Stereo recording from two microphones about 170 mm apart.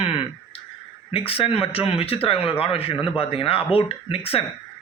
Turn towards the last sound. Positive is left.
turn(degrees=35)  # may be behind; listen again after turning